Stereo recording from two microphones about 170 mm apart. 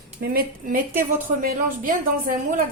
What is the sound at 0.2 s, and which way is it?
A woman's voice, 55° right (ahead or behind).